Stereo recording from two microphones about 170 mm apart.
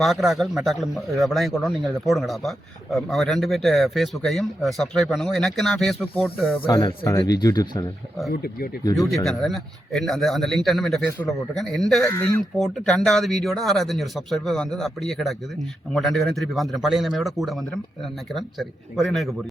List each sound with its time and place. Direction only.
0.0 s speech: centre (ahead or behind)
6.6 s speech: 20° left (ahead or behind)
8.3 s speech: 65° left (ahead or behind)
9.0 s speech: centre (ahead or behind)
12.0 s speech: 15° left (ahead or behind)
12.5 s speech: centre (ahead or behind)
18.9 s speech: centre (ahead or behind)